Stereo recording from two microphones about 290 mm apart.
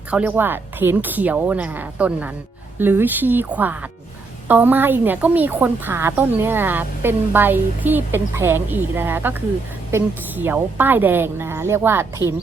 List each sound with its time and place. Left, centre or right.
0.1 s speech: centre